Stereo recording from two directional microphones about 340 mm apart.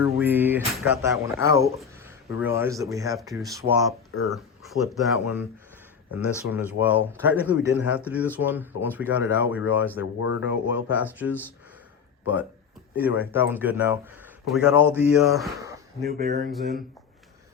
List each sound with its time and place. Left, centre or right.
0.0 s speech: centre
4.1 s speech: left
5.2 s speech: centre
10.2 s speech: left
10.9 s speech: centre
13.0 s speech: centre
16.0 s speech: right